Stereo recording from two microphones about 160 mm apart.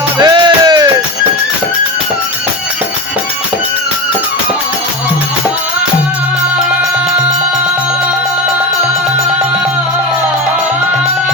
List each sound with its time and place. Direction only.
0.2 s music: 25° right (ahead or behind)